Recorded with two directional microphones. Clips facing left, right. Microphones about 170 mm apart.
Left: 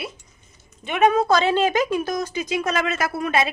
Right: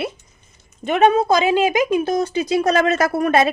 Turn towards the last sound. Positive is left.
turn(degrees=-45)  # may be behind; listen again after turning